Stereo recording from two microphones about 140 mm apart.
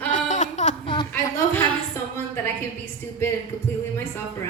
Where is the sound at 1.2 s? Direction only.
15° left (ahead or behind).